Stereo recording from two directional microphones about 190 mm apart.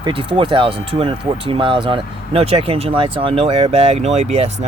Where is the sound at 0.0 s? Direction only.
25° right (ahead or behind).